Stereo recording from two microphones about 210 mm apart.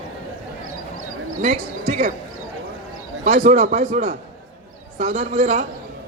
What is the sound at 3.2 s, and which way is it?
A man's voice, 30° right (ahead or behind).